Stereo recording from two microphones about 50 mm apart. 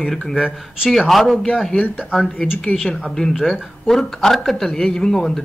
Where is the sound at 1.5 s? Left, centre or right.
Centre.